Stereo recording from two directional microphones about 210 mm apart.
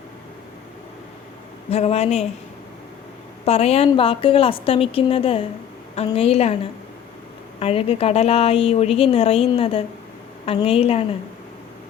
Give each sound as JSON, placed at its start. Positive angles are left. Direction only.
{"t": 1.7, "sound": "a woman's voice", "side_deg": 30}
{"t": 3.4, "sound": "a woman's voice", "side_deg": 30}
{"t": 7.6, "sound": "a woman's voice", "side_deg": 25}